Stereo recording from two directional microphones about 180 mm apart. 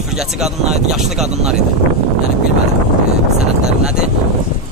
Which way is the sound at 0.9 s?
Centre (ahead or behind).